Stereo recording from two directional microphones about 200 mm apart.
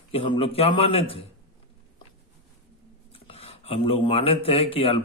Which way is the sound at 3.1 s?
30° left (ahead or behind).